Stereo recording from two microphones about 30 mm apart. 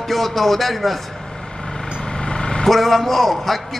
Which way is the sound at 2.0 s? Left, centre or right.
Left.